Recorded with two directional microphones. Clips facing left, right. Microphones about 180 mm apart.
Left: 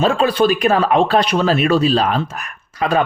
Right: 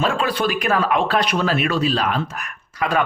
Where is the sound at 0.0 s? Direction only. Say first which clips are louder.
Left 6 dB; 25° left (ahead or behind).